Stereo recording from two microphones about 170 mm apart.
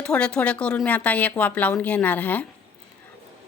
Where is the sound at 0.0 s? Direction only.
5° left (ahead or behind).